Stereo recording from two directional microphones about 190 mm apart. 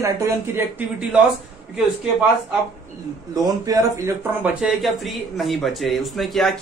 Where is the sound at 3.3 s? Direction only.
20° right (ahead or behind).